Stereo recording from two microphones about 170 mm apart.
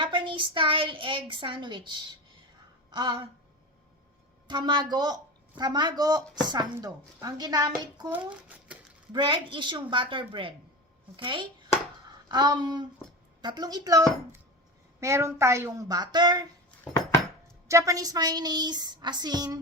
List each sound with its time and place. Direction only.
0.0 s speech: 30° right (ahead or behind)
4.4 s speech: 25° right (ahead or behind)
8.1 s speech: 10° right (ahead or behind)
9.1 s a woman's voice: 30° right (ahead or behind)
17.7 s speech: 20° right (ahead or behind)